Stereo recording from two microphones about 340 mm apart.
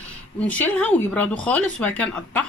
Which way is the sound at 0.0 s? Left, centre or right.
Centre.